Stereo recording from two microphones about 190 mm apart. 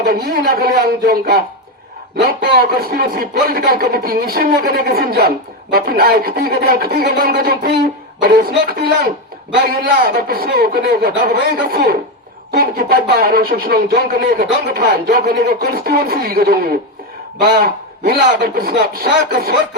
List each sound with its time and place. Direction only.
0.0 s speech: 55° right (ahead or behind)